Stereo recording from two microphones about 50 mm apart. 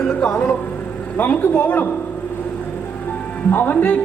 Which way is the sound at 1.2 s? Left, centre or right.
Left.